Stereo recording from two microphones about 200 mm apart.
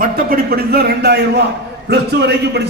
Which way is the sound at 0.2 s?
50° right (ahead or behind).